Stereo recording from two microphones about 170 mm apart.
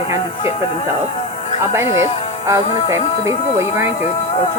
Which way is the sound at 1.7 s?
15° right (ahead or behind).